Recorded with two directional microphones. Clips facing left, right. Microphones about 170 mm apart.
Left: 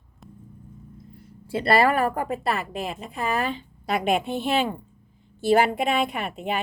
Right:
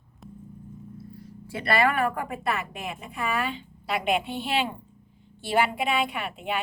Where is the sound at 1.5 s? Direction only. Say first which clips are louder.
Left 4 dB; 30° left (ahead or behind).